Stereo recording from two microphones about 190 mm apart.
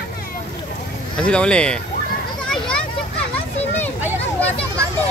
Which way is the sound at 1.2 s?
5° left (ahead or behind).